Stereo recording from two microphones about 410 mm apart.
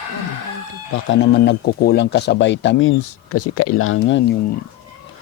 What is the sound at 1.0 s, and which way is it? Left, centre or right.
Speech, left.